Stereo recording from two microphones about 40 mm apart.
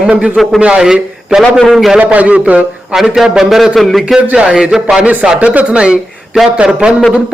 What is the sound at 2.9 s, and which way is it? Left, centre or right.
A man's voice, centre.